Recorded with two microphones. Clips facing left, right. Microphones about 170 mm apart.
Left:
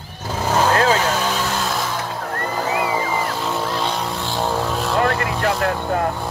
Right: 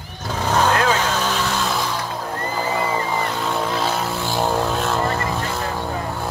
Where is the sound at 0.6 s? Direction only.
30° left (ahead or behind).